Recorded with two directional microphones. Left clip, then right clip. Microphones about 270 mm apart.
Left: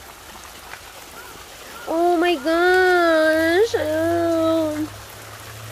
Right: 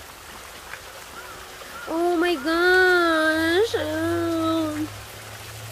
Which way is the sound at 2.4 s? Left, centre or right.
Centre.